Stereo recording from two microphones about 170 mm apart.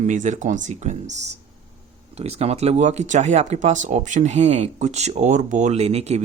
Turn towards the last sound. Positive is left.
turn(degrees=-40)  # may be behind; listen again after turning